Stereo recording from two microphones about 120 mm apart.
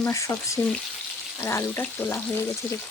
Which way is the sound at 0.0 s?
25° left (ahead or behind).